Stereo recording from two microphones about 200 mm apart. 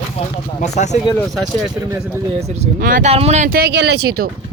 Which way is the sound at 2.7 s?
45° right (ahead or behind).